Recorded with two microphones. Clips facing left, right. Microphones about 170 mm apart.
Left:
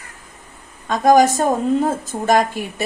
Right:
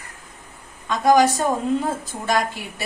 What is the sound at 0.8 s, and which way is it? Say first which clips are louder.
Speech: left 3 dB; 50° left (ahead or behind).